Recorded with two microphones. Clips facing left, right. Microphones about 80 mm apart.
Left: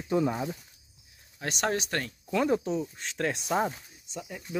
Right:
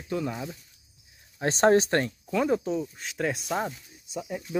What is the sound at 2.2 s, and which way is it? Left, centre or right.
Speech, centre.